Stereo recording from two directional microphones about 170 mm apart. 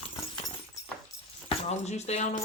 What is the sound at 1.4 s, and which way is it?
Speech, 40° left (ahead or behind).